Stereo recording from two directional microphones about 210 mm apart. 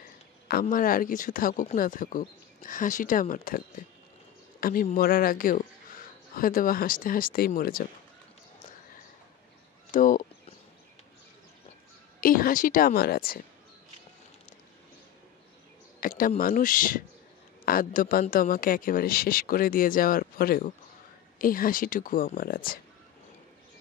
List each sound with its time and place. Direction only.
0.5 s speech: 45° left (ahead or behind)
9.8 s speech: 40° left (ahead or behind)
12.2 s speech: 45° left (ahead or behind)
16.0 s speech: 40° left (ahead or behind)